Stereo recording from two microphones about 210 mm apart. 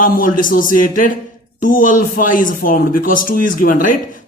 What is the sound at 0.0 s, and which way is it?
Speech, 40° left (ahead or behind).